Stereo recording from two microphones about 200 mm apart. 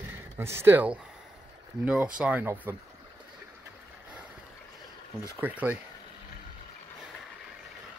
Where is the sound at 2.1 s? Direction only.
5° right (ahead or behind).